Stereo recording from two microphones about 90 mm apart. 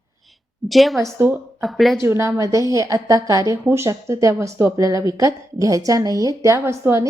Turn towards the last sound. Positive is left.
turn(degrees=-30)  # may be behind; listen again after turning